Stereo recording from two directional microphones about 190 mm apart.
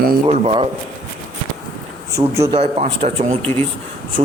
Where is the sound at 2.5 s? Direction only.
35° right (ahead or behind).